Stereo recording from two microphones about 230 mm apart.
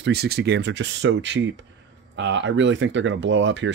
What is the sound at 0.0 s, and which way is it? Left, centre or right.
Speech, right.